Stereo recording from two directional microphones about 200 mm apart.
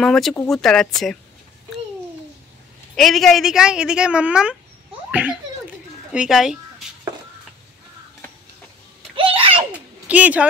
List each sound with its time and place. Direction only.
0.0 s a woman's voice: centre (ahead or behind)
3.0 s a woman's voice: centre (ahead or behind)
9.1 s a sound: 25° right (ahead or behind)
10.0 s speech: 5° right (ahead or behind)